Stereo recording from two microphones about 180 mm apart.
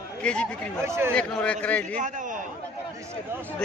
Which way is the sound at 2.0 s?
45° right (ahead or behind).